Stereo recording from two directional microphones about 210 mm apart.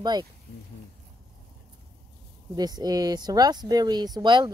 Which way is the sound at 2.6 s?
20° right (ahead or behind).